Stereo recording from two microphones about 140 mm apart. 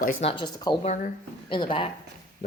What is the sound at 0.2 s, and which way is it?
Speech, 40° left (ahead or behind).